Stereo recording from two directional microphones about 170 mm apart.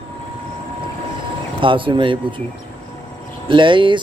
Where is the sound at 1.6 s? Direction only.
30° right (ahead or behind).